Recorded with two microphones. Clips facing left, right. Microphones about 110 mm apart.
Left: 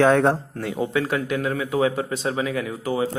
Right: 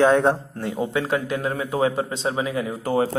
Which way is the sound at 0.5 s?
25° right (ahead or behind).